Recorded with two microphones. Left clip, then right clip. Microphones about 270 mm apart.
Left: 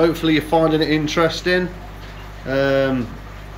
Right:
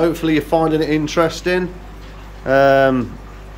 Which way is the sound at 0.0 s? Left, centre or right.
Centre.